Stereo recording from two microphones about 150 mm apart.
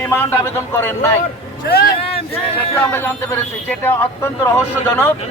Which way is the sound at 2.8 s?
15° left (ahead or behind).